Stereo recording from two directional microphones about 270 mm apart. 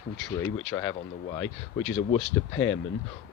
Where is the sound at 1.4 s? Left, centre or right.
Left.